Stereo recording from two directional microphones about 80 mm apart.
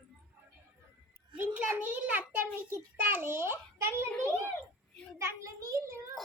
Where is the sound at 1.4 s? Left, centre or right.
Right.